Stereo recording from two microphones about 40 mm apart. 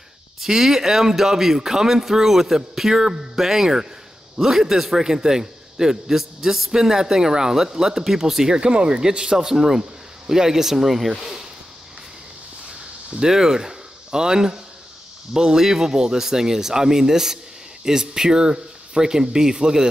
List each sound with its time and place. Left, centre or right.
0.4 s a man's voice: centre
8.5 s a man's voice: right
13.2 s a man's voice: centre